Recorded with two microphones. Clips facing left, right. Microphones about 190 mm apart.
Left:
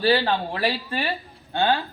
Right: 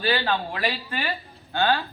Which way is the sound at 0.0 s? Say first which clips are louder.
Left 4 dB; 30° left (ahead or behind).